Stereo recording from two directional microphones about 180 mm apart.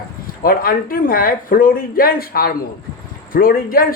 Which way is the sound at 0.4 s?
55° left (ahead or behind).